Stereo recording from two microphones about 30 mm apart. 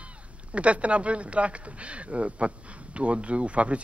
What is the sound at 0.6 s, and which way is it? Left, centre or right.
Speech, right.